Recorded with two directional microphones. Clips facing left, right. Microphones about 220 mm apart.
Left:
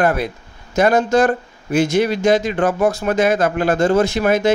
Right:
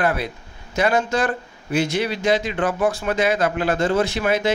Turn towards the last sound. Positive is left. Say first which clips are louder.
# left 4 dB
turn(degrees=45)  # may be behind; listen again after turning